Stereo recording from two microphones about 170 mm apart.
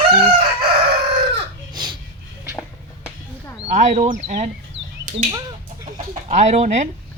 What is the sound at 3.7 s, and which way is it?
Speech, 45° right (ahead or behind).